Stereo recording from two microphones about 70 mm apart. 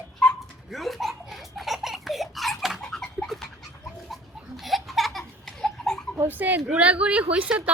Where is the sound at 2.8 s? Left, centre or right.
Centre.